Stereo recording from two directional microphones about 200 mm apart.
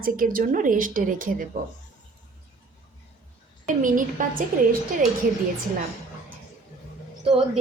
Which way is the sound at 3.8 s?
40° right (ahead or behind).